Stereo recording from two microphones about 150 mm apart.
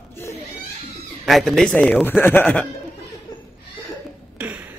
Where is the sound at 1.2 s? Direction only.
Centre (ahead or behind).